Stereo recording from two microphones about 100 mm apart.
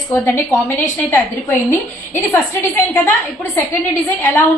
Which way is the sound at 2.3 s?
20° left (ahead or behind).